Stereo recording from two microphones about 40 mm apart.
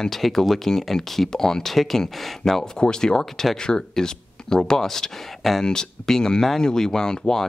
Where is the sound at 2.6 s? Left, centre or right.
Left.